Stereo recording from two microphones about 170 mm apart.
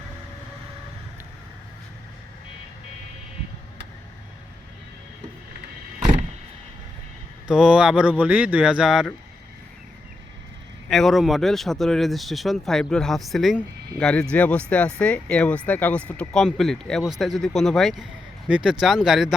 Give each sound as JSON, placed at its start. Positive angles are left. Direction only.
{"t": 7.4, "sound": "speech", "side_deg": -5}
{"t": 10.8, "sound": "speech", "side_deg": 0}